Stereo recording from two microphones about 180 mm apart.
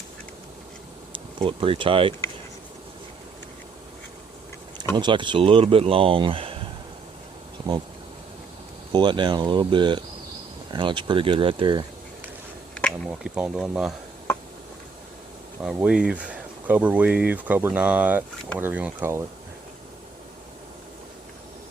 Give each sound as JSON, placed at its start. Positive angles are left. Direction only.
{"t": 1.1, "sound": "speech", "side_deg": -30}
{"t": 4.9, "sound": "speech", "side_deg": -25}
{"t": 8.9, "sound": "speech", "side_deg": -25}
{"t": 12.7, "sound": "speech", "side_deg": 0}
{"t": 15.6, "sound": "speech", "side_deg": -5}